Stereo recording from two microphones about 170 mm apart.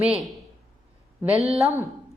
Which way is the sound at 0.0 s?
5° right (ahead or behind).